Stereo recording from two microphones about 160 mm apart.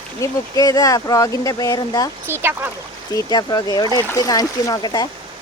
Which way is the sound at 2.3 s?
15° right (ahead or behind).